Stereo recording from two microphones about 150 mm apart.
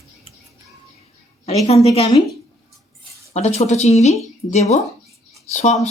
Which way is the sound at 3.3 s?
45° left (ahead or behind).